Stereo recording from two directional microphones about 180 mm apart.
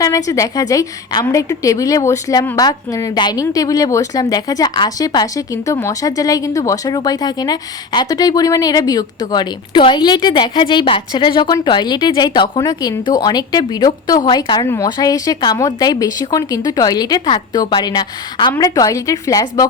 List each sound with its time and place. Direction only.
0.0 s a woman's voice: 20° left (ahead or behind)